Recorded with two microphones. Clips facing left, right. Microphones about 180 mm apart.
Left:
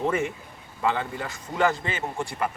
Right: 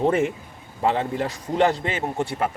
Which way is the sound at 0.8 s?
30° right (ahead or behind).